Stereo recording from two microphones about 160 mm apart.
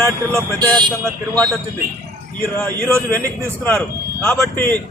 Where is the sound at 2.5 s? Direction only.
10° left (ahead or behind).